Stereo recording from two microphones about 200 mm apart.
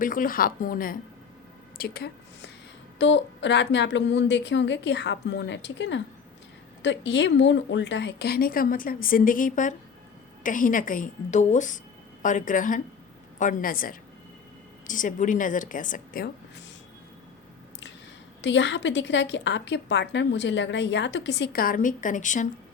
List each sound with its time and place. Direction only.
0.0 s a woman's voice: 40° left (ahead or behind)
18.4 s a woman's voice: 65° left (ahead or behind); by 22.4 s 40° left (ahead or behind)